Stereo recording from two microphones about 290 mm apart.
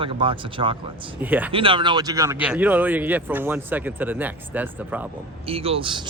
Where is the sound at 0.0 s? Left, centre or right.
Centre.